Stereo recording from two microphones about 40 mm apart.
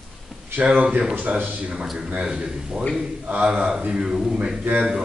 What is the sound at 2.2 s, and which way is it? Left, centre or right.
Speech, centre.